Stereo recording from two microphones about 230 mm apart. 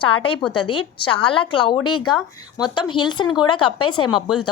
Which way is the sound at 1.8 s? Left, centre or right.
Left.